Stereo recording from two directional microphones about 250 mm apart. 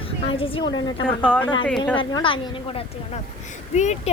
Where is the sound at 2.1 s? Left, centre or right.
Centre.